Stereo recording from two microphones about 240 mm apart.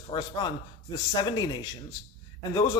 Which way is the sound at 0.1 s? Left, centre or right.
Centre.